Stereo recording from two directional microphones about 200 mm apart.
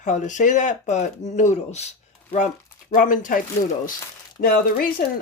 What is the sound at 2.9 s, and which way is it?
Speech, 40° left (ahead or behind).